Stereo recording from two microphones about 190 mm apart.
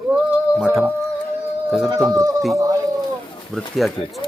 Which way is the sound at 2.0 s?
15° right (ahead or behind).